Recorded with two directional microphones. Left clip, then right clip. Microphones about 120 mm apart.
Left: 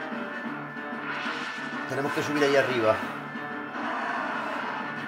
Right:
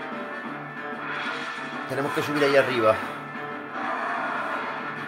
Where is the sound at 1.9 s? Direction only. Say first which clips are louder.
Right 2 dB; 25° right (ahead or behind).